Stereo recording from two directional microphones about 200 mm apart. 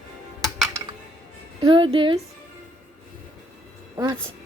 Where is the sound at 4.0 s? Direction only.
20° right (ahead or behind).